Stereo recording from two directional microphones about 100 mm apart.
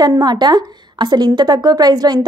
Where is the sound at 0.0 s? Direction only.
45° right (ahead or behind).